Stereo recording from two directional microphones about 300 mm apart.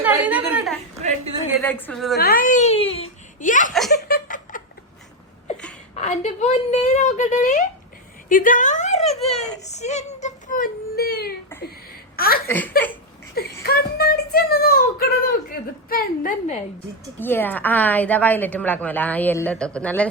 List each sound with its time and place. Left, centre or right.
0.0 s a sound: centre
1.6 s a woman's voice: centre
2.1 s speech: left
3.7 s giggle: centre
4.1 s a sound: left
6.0 s a woman's voice: left
8.3 s a sound: left
9.4 s child singing: left
12.1 s a sound: left
12.5 s speech: centre
13.3 s a woman's voice: left
17.2 s a woman's voice: centre